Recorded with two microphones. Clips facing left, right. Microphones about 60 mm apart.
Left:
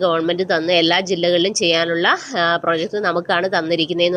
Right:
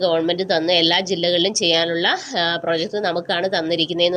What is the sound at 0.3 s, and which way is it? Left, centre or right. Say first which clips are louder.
A woman's voice: left 1 dB; left.